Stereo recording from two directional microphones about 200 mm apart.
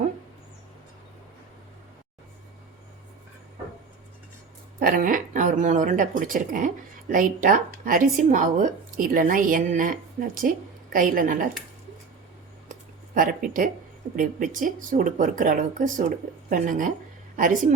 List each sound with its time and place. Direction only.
4.8 s speech: 45° right (ahead or behind)
13.1 s a woman's voice: 45° right (ahead or behind)